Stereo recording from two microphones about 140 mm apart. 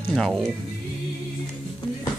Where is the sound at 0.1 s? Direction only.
5° left (ahead or behind).